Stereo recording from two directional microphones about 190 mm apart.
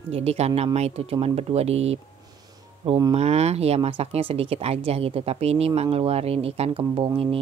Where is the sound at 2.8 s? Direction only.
20° right (ahead or behind).